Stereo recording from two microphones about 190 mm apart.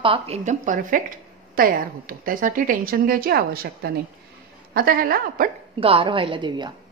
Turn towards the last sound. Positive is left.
turn(degrees=-25)  # may be behind; listen again after turning